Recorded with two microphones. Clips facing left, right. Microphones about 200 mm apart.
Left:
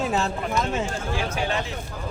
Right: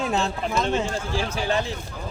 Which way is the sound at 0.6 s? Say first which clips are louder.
Right 2 dB; 30° right (ahead or behind).